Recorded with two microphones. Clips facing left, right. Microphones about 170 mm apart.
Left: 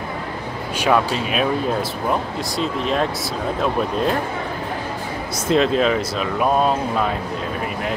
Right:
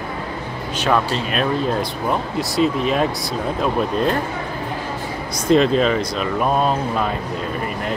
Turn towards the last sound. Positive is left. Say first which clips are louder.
# even
turn(degrees=0)  # may be behind; listen again after turning